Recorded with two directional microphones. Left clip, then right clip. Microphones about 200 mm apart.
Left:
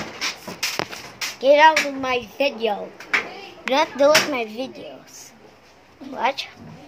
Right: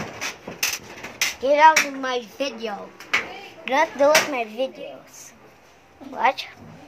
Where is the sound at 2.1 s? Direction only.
Centre (ahead or behind).